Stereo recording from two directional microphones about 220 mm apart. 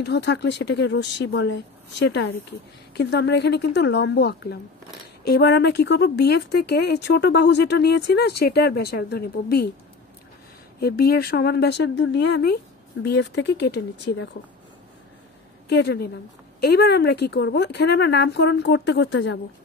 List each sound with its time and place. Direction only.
0.0 s speech: 50° left (ahead or behind)
10.8 s speech: 45° left (ahead or behind)
15.7 s speech: 50° left (ahead or behind)